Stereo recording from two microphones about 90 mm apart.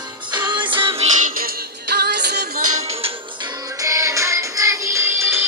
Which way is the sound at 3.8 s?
35° right (ahead or behind).